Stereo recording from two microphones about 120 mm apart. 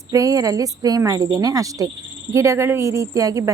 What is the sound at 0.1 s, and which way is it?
Insect, 30° right (ahead or behind).